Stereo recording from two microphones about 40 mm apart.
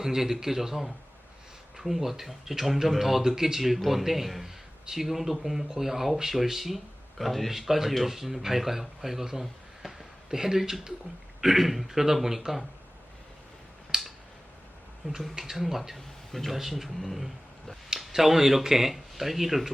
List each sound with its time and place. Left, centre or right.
0.0 s speech: centre
13.9 s a sound: centre
15.0 s speech: centre
16.0 s speech: centre
17.8 s speech: centre